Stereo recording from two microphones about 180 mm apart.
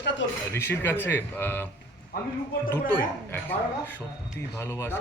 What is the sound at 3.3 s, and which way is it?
Speech, 10° left (ahead or behind).